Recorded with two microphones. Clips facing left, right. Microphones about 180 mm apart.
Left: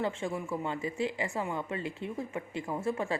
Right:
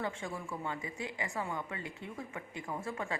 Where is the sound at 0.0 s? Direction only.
25° left (ahead or behind).